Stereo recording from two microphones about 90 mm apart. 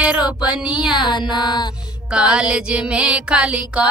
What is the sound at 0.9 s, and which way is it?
Music, 55° left (ahead or behind).